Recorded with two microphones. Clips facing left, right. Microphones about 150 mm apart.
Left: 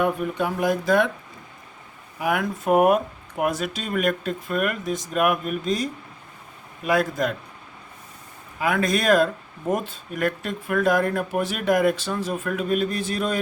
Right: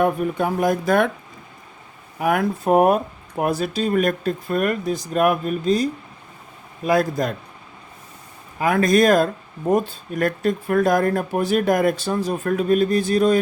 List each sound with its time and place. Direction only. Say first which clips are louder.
0.0 s speech: right 3 dB; 45° right (ahead or behind)
2.1 s speech: right 4 dB; 45° right (ahead or behind)
2.4 s speech: right 2 dB; 35° right (ahead or behind)
8.5 s speech: right 6 dB; 40° right (ahead or behind)